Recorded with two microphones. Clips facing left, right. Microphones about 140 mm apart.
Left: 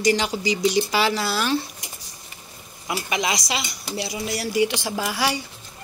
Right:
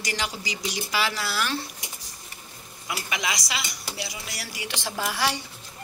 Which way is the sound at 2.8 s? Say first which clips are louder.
Left 5 dB; 30° left (ahead or behind).